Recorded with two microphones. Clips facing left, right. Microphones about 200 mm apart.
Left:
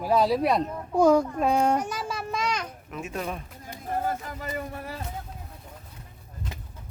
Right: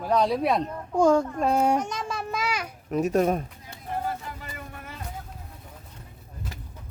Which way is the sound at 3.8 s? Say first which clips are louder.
Left 2 dB; 45° left (ahead or behind).